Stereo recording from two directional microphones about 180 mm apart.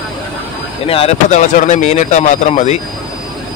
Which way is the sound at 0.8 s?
35° left (ahead or behind).